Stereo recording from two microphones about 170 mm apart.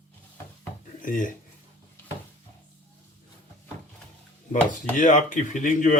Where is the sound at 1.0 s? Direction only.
50° left (ahead or behind).